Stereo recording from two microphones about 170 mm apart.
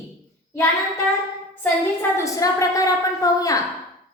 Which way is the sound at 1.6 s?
15° left (ahead or behind).